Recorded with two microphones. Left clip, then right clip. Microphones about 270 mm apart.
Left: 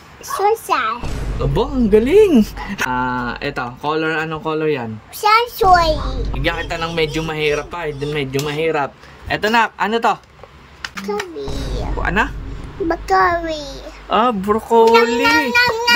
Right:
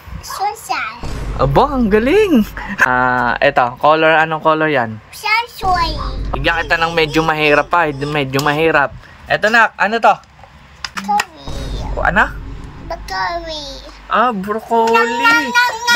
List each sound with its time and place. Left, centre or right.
0.4 s a child's voice: centre
1.0 s music: centre
1.4 s speech: centre
5.2 s a sound: centre
5.8 s a child's voice: centre
6.4 s speech: centre
8.8 s speech: centre
11.5 s music: centre
12.8 s a child's voice: centre